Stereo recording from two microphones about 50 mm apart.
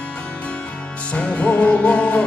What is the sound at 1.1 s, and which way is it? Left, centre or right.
Music, left.